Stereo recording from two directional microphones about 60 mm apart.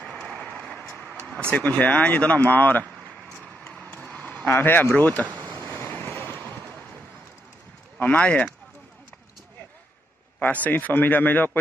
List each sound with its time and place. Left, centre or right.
0.3 s vehicle: left
1.5 s speech: left
3.8 s a sound: left
4.5 s speech: left
4.9 s a sound: left
8.0 s speech: left
10.4 s speech: left